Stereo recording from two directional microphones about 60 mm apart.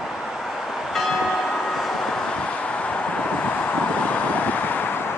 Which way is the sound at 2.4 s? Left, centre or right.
Left.